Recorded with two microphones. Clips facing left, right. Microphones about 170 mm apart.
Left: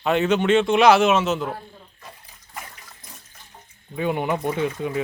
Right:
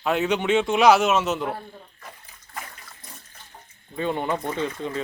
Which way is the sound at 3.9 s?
10° left (ahead or behind).